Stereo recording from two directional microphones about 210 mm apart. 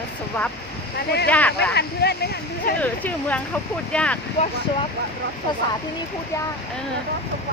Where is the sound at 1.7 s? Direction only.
50° left (ahead or behind).